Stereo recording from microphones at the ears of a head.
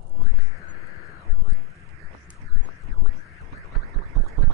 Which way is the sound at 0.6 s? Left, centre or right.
Left.